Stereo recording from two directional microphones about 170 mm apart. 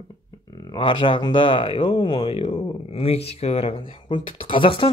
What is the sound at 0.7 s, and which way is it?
Speech, 30° left (ahead or behind).